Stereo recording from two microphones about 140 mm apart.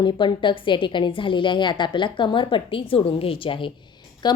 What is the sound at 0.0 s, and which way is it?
A woman's voice, 35° left (ahead or behind).